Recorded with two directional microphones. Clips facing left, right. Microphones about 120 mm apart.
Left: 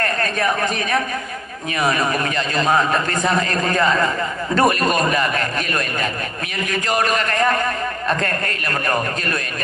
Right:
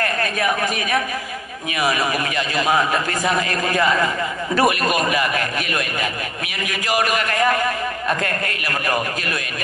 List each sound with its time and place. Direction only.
0.0 s a man's voice: 35° left (ahead or behind)
4.6 s a man's voice: 5° right (ahead or behind)
5.3 s a man's voice: 35° left (ahead or behind)
8.2 s a man's voice: 35° left (ahead or behind)